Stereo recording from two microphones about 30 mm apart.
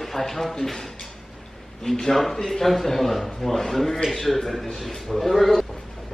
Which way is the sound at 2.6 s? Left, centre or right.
Centre.